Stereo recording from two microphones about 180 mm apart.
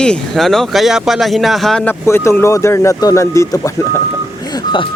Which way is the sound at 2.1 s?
15° left (ahead or behind).